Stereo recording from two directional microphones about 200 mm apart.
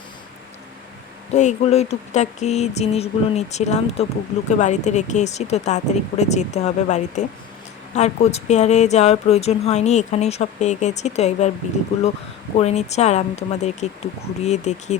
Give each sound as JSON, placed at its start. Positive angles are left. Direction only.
{"t": 1.3, "sound": "speech", "side_deg": 35}